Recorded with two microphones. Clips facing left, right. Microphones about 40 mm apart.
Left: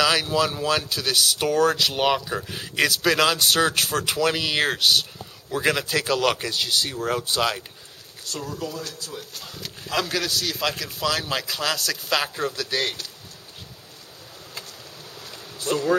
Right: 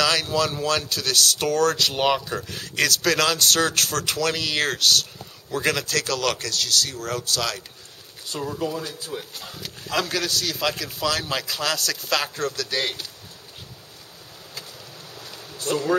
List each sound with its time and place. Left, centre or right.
0.0 s speech: centre
8.3 s speech: centre
9.4 s a man's voice: centre
12.8 s a man's voice: centre
15.1 s bee: centre